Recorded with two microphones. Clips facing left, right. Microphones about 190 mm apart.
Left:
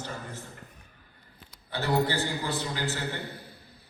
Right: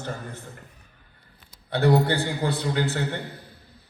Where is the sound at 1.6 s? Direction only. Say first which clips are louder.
Right 7 dB; 60° right (ahead or behind).